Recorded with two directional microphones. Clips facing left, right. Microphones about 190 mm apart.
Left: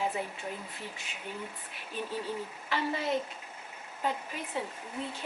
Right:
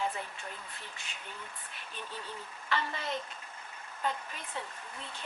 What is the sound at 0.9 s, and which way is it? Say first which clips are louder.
Speech: left 2 dB; 5° left (ahead or behind).